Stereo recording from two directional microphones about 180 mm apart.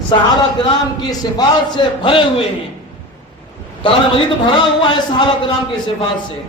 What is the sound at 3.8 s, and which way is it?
A man's voice, 30° left (ahead or behind).